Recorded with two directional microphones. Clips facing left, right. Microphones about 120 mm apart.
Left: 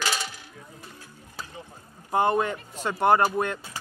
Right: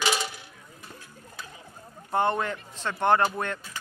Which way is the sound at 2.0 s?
10° left (ahead or behind).